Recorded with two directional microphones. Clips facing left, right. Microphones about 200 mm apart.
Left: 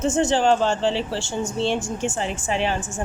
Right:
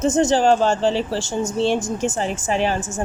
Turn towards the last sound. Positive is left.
turn(degrees=-40)  # may be behind; listen again after turning